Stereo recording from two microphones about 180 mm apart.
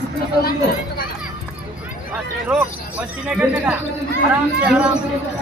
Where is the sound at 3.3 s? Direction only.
10° right (ahead or behind).